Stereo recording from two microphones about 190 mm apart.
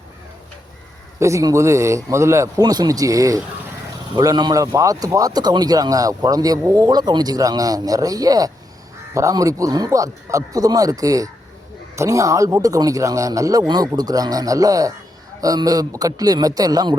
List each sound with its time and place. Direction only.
1.2 s a man's voice: 15° right (ahead or behind)